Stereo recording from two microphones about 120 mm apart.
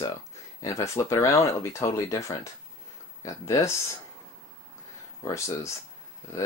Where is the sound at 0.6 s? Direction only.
25° left (ahead or behind).